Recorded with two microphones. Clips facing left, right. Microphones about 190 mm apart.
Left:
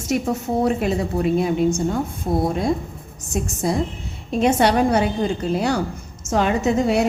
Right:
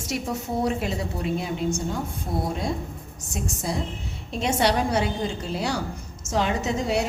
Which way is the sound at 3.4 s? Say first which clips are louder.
Left 7 dB; 55° left (ahead or behind).